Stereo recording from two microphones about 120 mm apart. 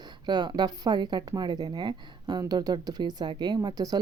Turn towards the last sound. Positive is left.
turn(degrees=-35)  # may be behind; listen again after turning